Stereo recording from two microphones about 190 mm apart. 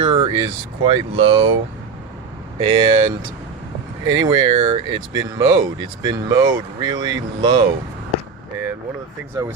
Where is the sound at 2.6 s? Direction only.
25° right (ahead or behind).